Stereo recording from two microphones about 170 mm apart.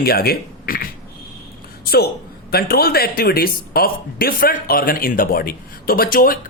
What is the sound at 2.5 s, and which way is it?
Speech, 65° left (ahead or behind).